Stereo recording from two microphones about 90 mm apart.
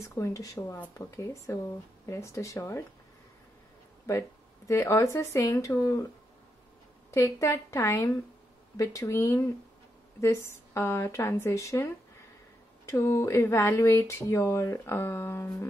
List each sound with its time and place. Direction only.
0.0 s speech: 35° left (ahead or behind)
4.6 s speech: 30° left (ahead or behind)
7.1 s speech: 35° left (ahead or behind)